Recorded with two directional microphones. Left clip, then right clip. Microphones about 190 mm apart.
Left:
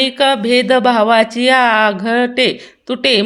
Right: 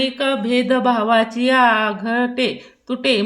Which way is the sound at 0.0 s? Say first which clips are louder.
Left 7 dB; 45° left (ahead or behind).